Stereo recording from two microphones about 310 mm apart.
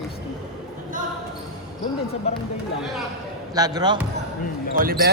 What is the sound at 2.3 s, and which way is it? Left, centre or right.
Music, centre.